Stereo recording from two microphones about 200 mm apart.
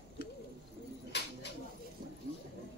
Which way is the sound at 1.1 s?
55° left (ahead or behind).